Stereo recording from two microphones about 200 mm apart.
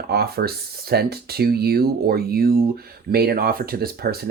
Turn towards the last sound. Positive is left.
turn(degrees=-50)  # may be behind; listen again after turning